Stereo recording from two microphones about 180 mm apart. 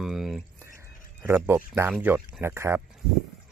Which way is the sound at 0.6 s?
15° right (ahead or behind).